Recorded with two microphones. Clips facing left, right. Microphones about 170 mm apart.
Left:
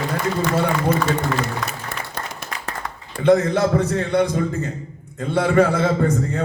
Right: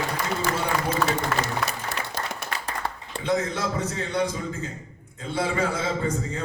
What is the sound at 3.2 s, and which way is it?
A man's voice, 65° left (ahead or behind).